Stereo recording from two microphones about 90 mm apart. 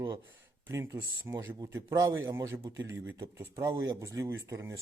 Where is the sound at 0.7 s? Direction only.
30° right (ahead or behind).